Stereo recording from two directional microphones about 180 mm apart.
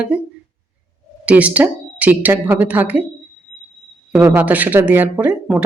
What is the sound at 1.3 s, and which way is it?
Speech, 10° right (ahead or behind).